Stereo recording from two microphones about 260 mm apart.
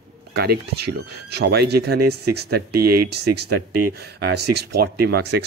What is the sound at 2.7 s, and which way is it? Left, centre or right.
Speech, right.